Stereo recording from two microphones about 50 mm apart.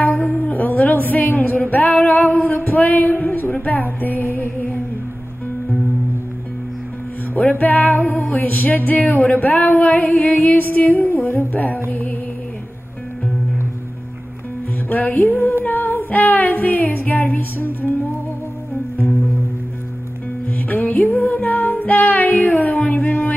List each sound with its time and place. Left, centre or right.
0.4 s a sound: left
4.0 s music: left
7.3 s music: left
14.9 s music: left
15.6 s female singing: left
16.1 s music: left
20.4 s music: left